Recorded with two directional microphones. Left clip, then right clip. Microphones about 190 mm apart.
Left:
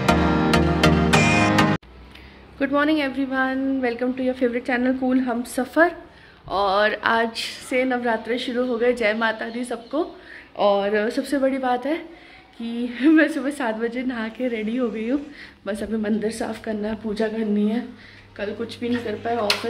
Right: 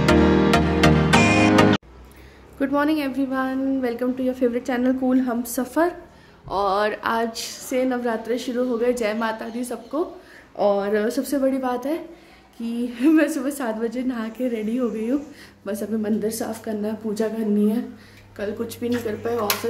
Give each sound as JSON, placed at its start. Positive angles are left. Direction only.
{"t": 0.8, "sound": "music", "side_deg": 0}
{"t": 2.6, "sound": "a woman's voice", "side_deg": -10}